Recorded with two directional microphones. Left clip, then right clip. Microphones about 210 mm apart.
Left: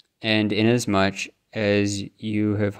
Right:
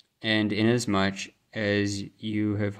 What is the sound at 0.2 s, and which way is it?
Speech, 30° left (ahead or behind).